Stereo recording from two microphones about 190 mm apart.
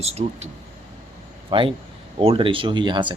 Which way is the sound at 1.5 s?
25° right (ahead or behind).